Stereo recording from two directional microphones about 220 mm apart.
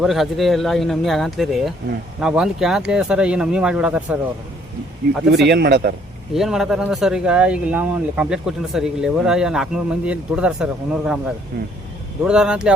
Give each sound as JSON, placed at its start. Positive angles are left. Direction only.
{"t": 0.0, "sound": "speech", "side_deg": 0}
{"t": 5.5, "sound": "a man's voice", "side_deg": -50}
{"t": 6.3, "sound": "speech", "side_deg": 0}